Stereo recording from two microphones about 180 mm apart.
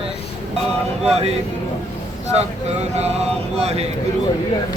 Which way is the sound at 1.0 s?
35° right (ahead or behind).